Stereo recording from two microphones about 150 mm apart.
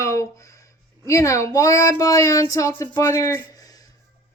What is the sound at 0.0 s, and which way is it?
Speech, 20° left (ahead or behind).